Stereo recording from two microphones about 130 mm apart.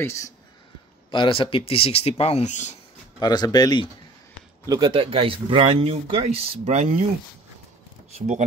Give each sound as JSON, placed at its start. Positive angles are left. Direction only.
{"t": 0.0, "sound": "speech", "side_deg": 20}
{"t": 1.1, "sound": "speech", "side_deg": 40}
{"t": 3.2, "sound": "speech", "side_deg": 30}
{"t": 4.6, "sound": "speech", "side_deg": -30}
{"t": 4.9, "sound": "speech", "side_deg": -45}
{"t": 8.1, "sound": "speech", "side_deg": -60}